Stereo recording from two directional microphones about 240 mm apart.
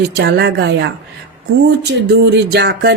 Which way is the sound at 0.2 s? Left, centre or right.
Right.